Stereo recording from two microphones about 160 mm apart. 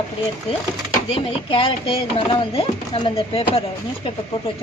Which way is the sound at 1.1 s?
35° left (ahead or behind).